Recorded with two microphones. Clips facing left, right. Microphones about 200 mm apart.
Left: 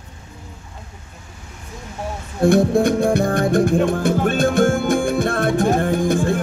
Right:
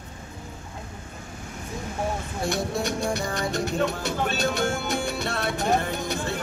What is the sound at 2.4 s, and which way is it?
Music, 55° left (ahead or behind).